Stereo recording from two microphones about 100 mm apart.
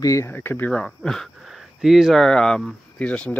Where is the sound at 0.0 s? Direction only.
35° left (ahead or behind).